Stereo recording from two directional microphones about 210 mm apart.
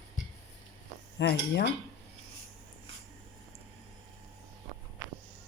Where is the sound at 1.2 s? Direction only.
55° left (ahead or behind).